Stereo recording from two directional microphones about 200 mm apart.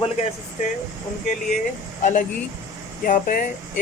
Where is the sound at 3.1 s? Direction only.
45° left (ahead or behind).